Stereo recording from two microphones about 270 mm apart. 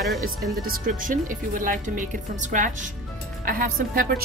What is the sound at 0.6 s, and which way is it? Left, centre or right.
A woman's voice, right.